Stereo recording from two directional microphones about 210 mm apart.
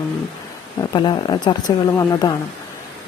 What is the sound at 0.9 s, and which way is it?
A woman's voice, 20° left (ahead or behind).